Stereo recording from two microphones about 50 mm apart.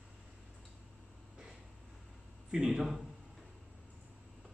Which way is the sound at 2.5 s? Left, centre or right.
Centre.